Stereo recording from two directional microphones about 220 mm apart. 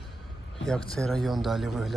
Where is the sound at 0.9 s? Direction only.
Centre (ahead or behind).